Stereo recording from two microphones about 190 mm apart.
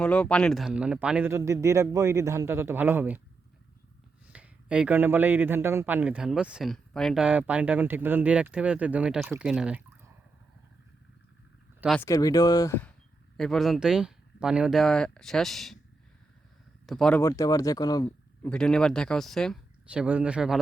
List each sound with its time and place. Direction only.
0.0 s speech: 5° left (ahead or behind); by 3.2 s 10° right (ahead or behind)
4.3 s speech: 5° right (ahead or behind)
12.0 s speech: 20° left (ahead or behind)
13.3 s speech: centre (ahead or behind)
16.8 s speech: centre (ahead or behind)
17.2 s speech: 20° left (ahead or behind)
18.4 s speech: 5° left (ahead or behind)